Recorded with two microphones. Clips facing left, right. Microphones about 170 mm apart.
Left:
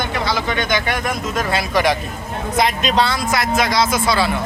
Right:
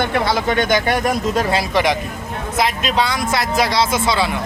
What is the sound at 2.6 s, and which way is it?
Speech, 5° right (ahead or behind).